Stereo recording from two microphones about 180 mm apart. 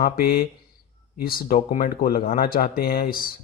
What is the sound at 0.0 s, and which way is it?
Speech, 55° left (ahead or behind).